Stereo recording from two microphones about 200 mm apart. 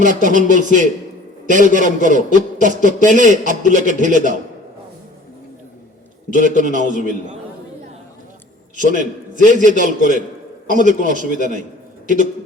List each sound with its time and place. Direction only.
0.0 s a man's voice: 40° right (ahead or behind)
6.3 s a man's voice: 40° right (ahead or behind)
6.8 s a man's voice: 40° left (ahead or behind)
8.7 s a man's voice: 40° right (ahead or behind)